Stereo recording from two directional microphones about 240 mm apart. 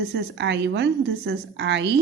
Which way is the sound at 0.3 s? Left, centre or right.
Right.